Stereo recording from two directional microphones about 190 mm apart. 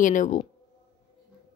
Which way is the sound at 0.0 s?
45° left (ahead or behind).